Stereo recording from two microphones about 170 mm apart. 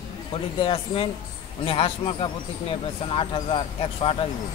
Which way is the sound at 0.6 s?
30° left (ahead or behind).